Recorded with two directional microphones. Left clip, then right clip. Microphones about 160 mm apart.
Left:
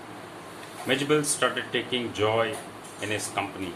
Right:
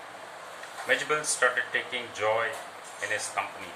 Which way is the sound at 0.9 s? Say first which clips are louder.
Left 2 dB; 20° left (ahead or behind).